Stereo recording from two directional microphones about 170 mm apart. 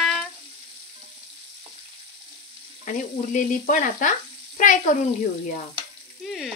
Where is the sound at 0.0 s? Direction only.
Centre (ahead or behind).